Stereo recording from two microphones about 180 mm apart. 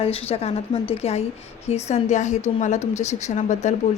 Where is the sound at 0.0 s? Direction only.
35° left (ahead or behind).